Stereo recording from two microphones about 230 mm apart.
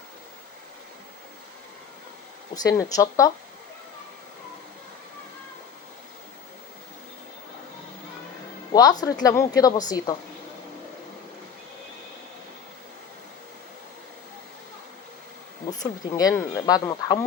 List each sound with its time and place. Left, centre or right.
2.6 s speech: centre
8.7 s speech: centre
15.7 s speech: centre